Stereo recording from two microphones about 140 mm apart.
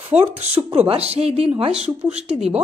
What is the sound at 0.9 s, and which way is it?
Speech, 45° right (ahead or behind).